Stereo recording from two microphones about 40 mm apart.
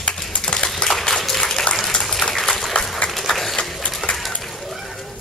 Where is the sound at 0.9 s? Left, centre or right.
Centre.